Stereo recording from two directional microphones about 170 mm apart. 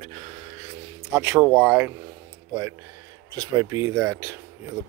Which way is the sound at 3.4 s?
20° right (ahead or behind).